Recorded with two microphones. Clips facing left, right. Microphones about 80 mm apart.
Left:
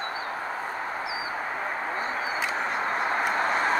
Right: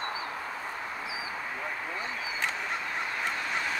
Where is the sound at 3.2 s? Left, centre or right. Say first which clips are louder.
Left 7 dB; left.